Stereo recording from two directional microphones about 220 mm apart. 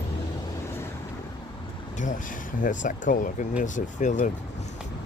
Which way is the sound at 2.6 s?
35° left (ahead or behind).